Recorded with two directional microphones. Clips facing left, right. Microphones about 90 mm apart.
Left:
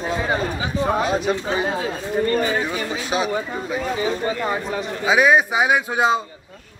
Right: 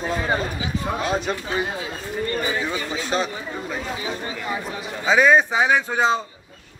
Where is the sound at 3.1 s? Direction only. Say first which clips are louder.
Left 1 dB; 5° left (ahead or behind).